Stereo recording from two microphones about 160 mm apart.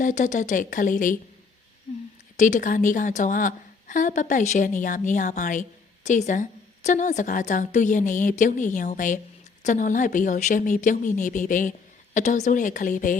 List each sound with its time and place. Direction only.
0.0 s speech: 50° left (ahead or behind)
2.3 s a woman's voice: 50° left (ahead or behind)